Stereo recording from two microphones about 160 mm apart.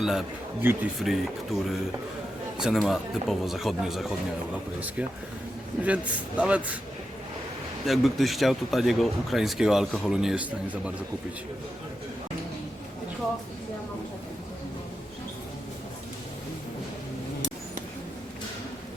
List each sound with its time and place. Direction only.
0.0 s speech: centre (ahead or behind)
0.6 s a man's voice: 15° right (ahead or behind)
0.9 s speech: centre (ahead or behind)
5.8 s a man's voice: 10° right (ahead or behind)
7.9 s speech: centre (ahead or behind)